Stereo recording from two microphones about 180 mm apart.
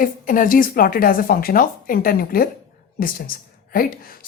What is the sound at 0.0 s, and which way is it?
Speech, 50° left (ahead or behind).